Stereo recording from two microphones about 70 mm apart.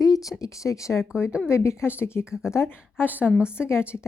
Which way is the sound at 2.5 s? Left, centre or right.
Left.